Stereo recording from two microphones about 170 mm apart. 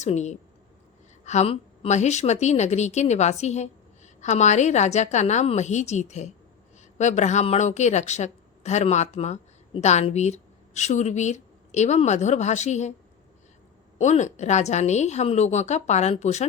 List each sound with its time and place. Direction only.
0.0 s a woman's voice: 40° left (ahead or behind)
14.0 s a woman's voice: 45° left (ahead or behind)